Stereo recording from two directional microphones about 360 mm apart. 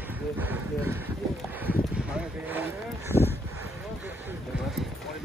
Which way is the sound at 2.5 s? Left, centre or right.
Centre.